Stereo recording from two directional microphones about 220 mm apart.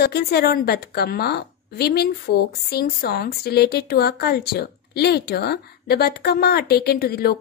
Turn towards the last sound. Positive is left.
turn(degrees=45)  # may be behind; listen again after turning